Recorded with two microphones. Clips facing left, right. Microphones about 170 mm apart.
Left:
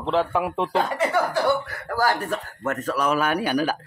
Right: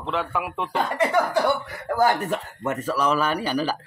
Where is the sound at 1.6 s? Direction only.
20° right (ahead or behind).